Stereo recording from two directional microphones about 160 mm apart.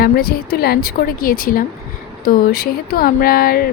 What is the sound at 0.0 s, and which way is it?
A woman's voice, 75° left (ahead or behind).